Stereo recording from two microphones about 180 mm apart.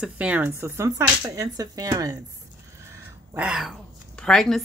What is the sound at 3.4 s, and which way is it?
Speech, 5° right (ahead or behind).